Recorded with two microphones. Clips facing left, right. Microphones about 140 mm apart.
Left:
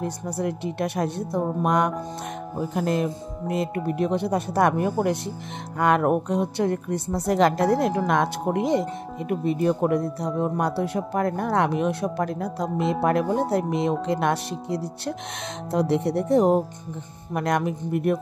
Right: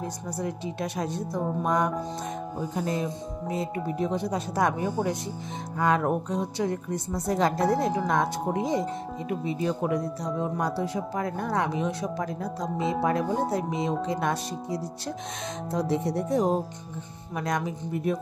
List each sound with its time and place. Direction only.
0.0 s speech: 65° left (ahead or behind)
9.3 s speech: 55° left (ahead or behind)